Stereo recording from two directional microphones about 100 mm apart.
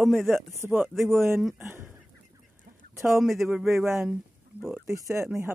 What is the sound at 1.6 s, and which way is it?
Speech, 25° right (ahead or behind).